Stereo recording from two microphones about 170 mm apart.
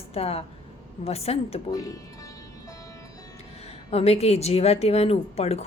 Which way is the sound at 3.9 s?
40° left (ahead or behind).